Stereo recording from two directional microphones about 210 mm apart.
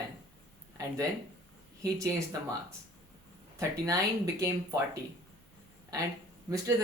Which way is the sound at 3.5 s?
15° right (ahead or behind).